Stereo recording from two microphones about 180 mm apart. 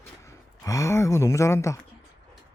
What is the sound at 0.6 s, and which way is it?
Speech, 15° left (ahead or behind).